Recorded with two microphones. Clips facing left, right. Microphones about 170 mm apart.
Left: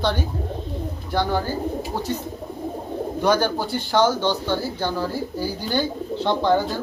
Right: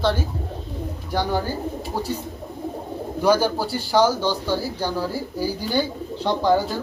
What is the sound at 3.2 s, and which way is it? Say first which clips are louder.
Speech: right 2 dB; 5° right (ahead or behind).